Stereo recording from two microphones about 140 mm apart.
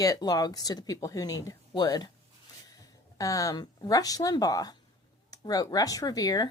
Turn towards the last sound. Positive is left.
turn(degrees=25)  # may be behind; listen again after turning